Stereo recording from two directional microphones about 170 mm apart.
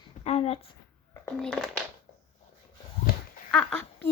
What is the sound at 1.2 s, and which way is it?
Speech, 5° left (ahead or behind).